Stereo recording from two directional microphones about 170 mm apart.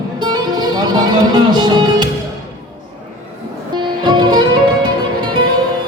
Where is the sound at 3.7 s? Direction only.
25° right (ahead or behind).